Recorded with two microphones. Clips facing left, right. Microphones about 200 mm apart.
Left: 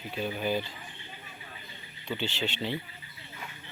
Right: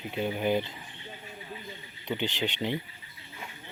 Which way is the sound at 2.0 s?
15° right (ahead or behind).